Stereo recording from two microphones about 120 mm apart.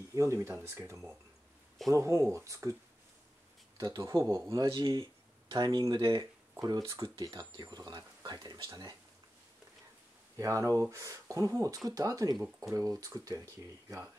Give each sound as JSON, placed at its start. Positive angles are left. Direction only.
{"t": 0.1, "sound": "speech", "side_deg": -25}
{"t": 3.7, "sound": "speech", "side_deg": -35}
{"t": 10.3, "sound": "speech", "side_deg": -25}
{"t": 12.4, "sound": "speech", "side_deg": -5}
{"t": 12.7, "sound": "speech", "side_deg": -30}